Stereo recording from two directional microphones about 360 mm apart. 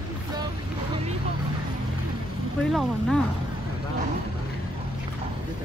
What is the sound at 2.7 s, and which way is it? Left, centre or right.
Speech, centre.